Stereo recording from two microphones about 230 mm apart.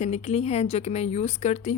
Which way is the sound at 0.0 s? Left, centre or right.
Left.